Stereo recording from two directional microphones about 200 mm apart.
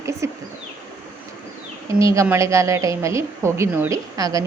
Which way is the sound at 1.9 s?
15° right (ahead or behind).